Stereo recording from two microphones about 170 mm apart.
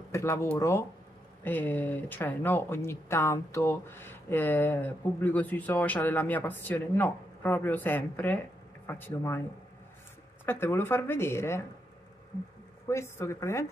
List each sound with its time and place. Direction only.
0.1 s speech: 15° left (ahead or behind)
10.4 s speech: 15° left (ahead or behind)
12.9 s speech: 15° left (ahead or behind)